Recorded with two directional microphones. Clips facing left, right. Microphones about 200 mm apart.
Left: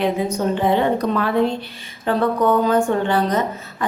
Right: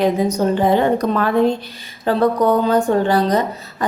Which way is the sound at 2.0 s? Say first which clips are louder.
Right 2 dB; 35° right (ahead or behind).